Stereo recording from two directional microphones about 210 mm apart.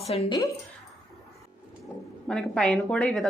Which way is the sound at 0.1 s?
30° left (ahead or behind).